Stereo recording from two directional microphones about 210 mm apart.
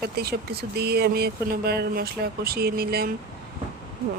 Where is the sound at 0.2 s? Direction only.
50° right (ahead or behind).